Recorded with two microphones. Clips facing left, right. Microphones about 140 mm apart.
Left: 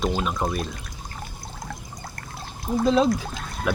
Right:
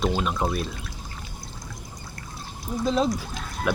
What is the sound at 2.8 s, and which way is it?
Speech, centre (ahead or behind).